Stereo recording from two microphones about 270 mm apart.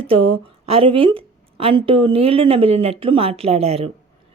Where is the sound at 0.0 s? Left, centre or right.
Right.